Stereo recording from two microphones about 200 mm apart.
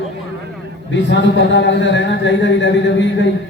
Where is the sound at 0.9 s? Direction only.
60° left (ahead or behind).